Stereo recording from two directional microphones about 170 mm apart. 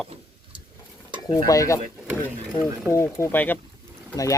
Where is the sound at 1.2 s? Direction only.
20° left (ahead or behind).